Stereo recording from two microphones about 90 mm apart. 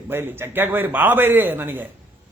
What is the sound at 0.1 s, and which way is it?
A man's voice, 25° right (ahead or behind).